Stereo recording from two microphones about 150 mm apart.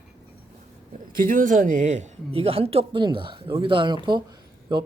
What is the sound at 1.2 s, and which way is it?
Speech, 65° right (ahead or behind).